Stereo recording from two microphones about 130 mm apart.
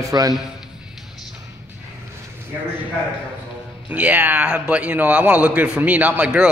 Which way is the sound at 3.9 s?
10° right (ahead or behind).